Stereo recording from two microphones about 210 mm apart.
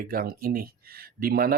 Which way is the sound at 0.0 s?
45° right (ahead or behind).